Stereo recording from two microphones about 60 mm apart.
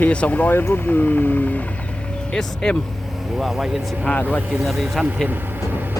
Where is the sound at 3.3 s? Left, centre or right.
Centre.